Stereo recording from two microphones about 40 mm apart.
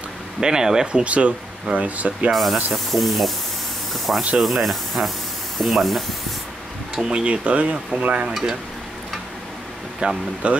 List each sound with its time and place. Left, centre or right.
0.4 s speech: centre
1.0 s speech: right
2.3 s speech: centre
3.9 s spray: centre
4.4 s speech: centre
7.0 s speech: right
10.0 s speech: right